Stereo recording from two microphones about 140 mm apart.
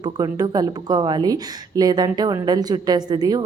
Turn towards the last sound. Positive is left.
turn(degrees=-30)  # may be behind; listen again after turning